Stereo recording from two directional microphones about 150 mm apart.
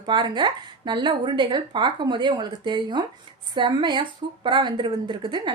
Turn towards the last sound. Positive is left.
turn(degrees=-30)  # may be behind; listen again after turning